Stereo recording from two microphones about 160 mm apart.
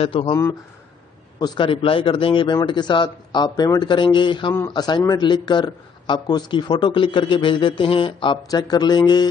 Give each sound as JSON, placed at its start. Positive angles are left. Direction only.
{"t": 0.0, "sound": "speech", "side_deg": 35}
{"t": 1.4, "sound": "a man's voice", "side_deg": 30}